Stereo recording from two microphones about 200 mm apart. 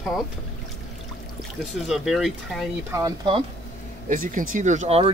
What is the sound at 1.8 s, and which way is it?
Speech, centre (ahead or behind).